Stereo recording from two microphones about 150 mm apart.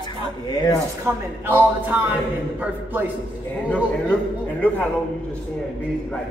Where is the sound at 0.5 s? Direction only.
25° left (ahead or behind).